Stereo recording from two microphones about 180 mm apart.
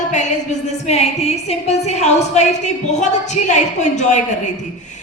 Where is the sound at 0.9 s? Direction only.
35° left (ahead or behind).